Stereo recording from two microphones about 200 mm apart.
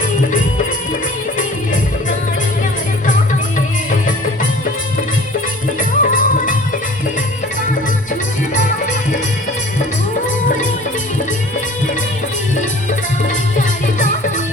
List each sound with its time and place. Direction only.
6.0 s music: 40° left (ahead or behind)
13.2 s music: 40° left (ahead or behind)